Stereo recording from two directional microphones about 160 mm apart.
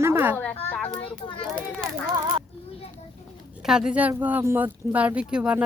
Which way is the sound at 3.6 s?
5° right (ahead or behind).